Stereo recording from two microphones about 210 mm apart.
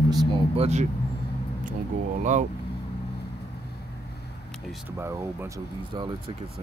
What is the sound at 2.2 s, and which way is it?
Speech, 35° right (ahead or behind).